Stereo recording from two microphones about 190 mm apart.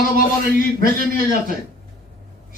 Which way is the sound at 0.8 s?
50° right (ahead or behind).